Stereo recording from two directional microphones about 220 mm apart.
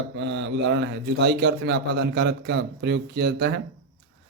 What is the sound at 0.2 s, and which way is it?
A man's voice, 55° right (ahead or behind).